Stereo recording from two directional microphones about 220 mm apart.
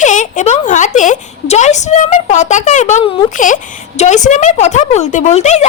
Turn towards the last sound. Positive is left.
turn(degrees=30)  # may be behind; listen again after turning